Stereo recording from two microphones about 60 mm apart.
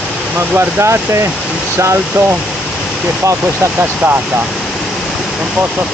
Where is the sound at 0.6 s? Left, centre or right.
Right.